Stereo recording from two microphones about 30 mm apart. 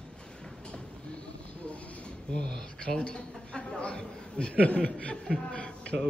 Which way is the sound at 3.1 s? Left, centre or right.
Left.